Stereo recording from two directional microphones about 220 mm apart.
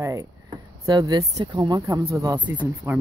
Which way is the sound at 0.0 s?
15° right (ahead or behind).